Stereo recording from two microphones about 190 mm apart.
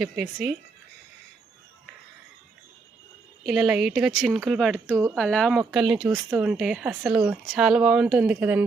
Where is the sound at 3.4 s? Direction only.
Centre (ahead or behind).